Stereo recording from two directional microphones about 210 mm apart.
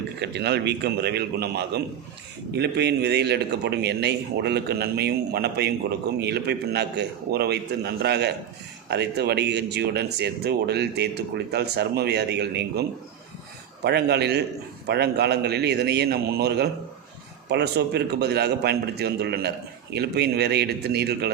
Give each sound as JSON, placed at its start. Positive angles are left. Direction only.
{"t": 0.2, "sound": "speech", "side_deg": -55}
{"t": 13.8, "sound": "speech", "side_deg": -50}